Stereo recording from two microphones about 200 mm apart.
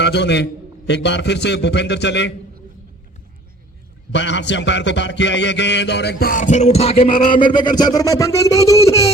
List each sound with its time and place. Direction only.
0.0 s a man's voice: 60° left (ahead or behind)
4.1 s mantra: 60° left (ahead or behind); by 9.1 s 15° left (ahead or behind)